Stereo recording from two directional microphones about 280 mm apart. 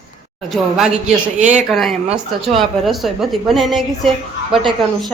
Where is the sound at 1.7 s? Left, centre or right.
Centre.